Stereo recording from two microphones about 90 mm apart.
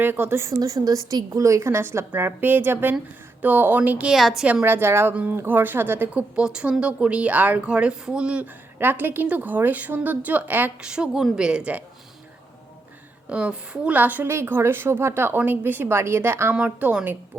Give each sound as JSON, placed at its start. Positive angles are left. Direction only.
{"t": 0.0, "sound": "a woman's voice", "side_deg": -25}
{"t": 4.1, "sound": "a woman's voice", "side_deg": 0}
{"t": 4.6, "sound": "a woman's voice", "side_deg": -25}
{"t": 5.1, "sound": "a woman's voice", "side_deg": -15}
{"t": 8.8, "sound": "a woman's voice", "side_deg": -20}
{"t": 13.3, "sound": "a woman's voice", "side_deg": -15}
{"t": 16.6, "sound": "a woman's voice", "side_deg": -15}